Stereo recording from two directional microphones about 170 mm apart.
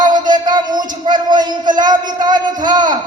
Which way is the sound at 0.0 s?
25° right (ahead or behind).